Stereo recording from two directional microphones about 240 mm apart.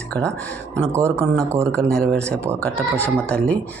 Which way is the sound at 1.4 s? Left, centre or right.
Centre.